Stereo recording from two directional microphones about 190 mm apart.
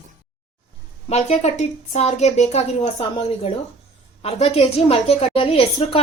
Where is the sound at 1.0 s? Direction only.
35° left (ahead or behind).